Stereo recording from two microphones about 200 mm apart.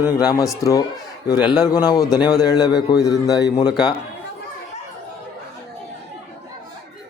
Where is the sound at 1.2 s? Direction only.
20° left (ahead or behind).